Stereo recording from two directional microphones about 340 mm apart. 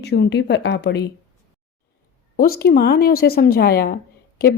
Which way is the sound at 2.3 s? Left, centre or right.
Left.